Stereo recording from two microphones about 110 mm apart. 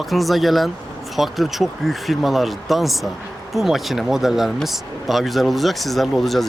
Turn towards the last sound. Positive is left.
turn(degrees=0)  # may be behind; listen again after turning